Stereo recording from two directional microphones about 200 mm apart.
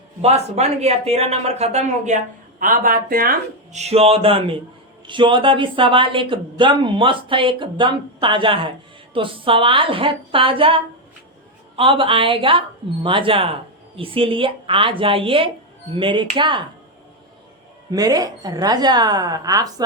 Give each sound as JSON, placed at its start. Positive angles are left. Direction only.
{"t": 0.2, "sound": "speech", "side_deg": -30}
{"t": 17.9, "sound": "speech", "side_deg": -20}